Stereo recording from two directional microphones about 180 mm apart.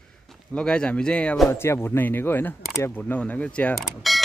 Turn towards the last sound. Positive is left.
turn(degrees=0)  # may be behind; listen again after turning